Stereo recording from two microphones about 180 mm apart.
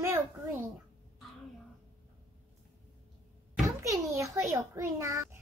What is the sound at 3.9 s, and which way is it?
A child's voice, 15° right (ahead or behind).